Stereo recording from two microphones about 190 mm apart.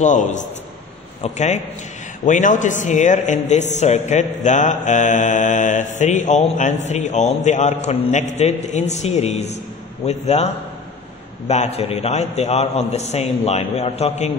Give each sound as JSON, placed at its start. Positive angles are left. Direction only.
{"t": 0.0, "sound": "a man's voice", "side_deg": 40}